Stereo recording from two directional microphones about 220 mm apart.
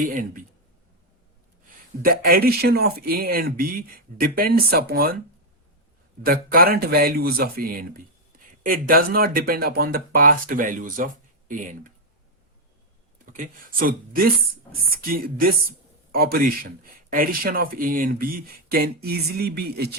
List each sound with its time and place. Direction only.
0.0 s speech: 35° right (ahead or behind)
2.0 s speech: 40° right (ahead or behind)
6.2 s speech: 40° right (ahead or behind)
13.3 s speech: 40° right (ahead or behind)